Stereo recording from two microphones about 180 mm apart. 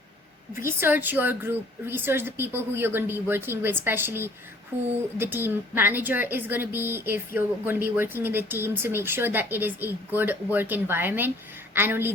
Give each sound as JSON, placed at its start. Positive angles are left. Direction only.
{"t": 0.5, "sound": "a woman's voice", "side_deg": -15}